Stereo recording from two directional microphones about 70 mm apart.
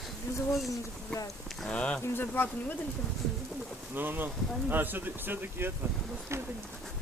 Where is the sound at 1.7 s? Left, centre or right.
Centre.